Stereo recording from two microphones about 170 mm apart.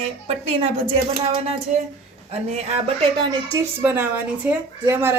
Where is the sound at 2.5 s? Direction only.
40° right (ahead or behind).